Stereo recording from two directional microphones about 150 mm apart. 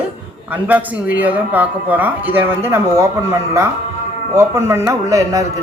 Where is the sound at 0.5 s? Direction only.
10° right (ahead or behind).